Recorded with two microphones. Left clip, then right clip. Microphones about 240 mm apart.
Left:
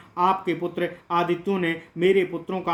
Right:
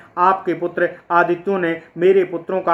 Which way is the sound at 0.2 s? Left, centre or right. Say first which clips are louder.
Right 6 dB; left.